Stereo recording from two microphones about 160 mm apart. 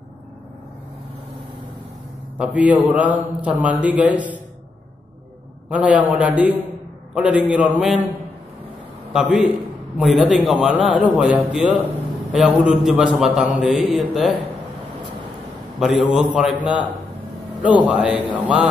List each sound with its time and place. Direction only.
2.3 s a man's voice: 10° right (ahead or behind)
5.7 s a man's voice: 10° right (ahead or behind)
9.1 s a man's voice: 5° right (ahead or behind)
15.8 s a man's voice: centre (ahead or behind)
17.8 s a man's voice: 10° right (ahead or behind)